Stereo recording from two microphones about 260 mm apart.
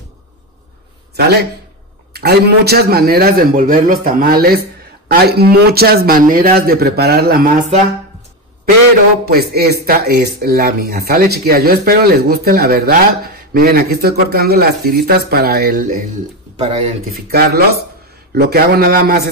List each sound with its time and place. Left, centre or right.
1.1 s a man's voice: right
9.3 s speech: right
17.3 s speech: right